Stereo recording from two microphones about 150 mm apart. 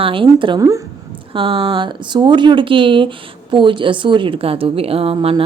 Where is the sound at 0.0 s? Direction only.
35° right (ahead or behind).